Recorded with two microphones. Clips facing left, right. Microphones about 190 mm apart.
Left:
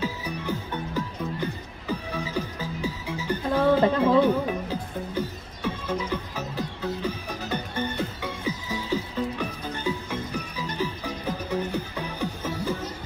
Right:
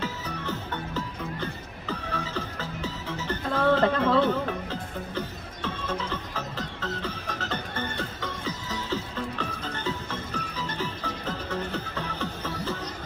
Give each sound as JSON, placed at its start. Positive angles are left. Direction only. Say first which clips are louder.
{"t": 0.0, "sound": "music", "louder": "left 3 dB", "side_deg": 10}